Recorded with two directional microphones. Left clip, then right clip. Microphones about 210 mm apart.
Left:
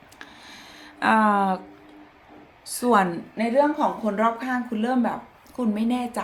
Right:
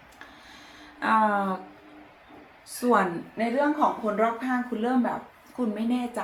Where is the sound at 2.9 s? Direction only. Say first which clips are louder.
Left 3 dB; 50° left (ahead or behind).